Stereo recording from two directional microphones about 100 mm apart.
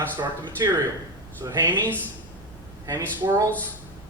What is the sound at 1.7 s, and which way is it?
Speech, 15° left (ahead or behind).